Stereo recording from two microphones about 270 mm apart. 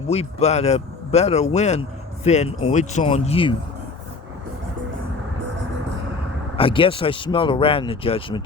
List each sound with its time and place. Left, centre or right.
0.1 s speech: left
6.6 s speech: centre